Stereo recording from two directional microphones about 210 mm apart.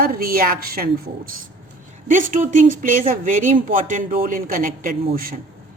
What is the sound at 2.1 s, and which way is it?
A woman's voice, 40° right (ahead or behind).